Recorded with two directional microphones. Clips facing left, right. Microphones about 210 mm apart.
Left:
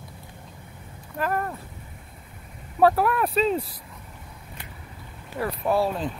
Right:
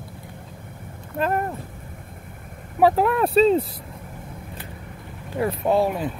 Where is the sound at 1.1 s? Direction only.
25° right (ahead or behind).